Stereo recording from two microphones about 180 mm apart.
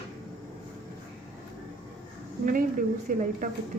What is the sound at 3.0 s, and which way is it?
Speech, 45° right (ahead or behind).